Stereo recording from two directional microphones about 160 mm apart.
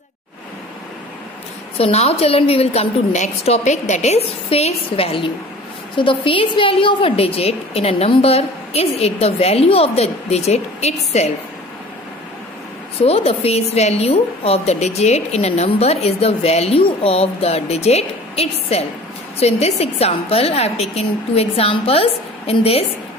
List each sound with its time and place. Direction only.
1.8 s a woman's voice: 40° left (ahead or behind)
13.0 s a woman's voice: 40° left (ahead or behind)